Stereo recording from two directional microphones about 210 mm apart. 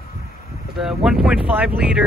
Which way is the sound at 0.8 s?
Centre (ahead or behind).